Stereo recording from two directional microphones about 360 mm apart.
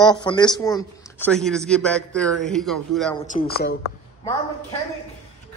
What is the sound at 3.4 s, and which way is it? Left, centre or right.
Speech, left.